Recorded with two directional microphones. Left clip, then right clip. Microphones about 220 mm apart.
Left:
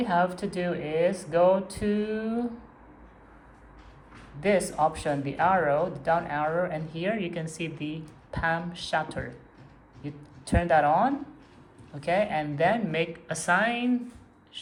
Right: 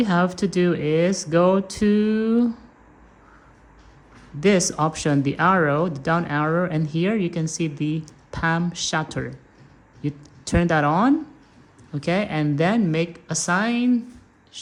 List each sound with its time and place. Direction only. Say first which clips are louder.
0.0 s speech: right 3 dB; 35° right (ahead or behind)
4.4 s a woman's voice: right 4 dB; 35° right (ahead or behind)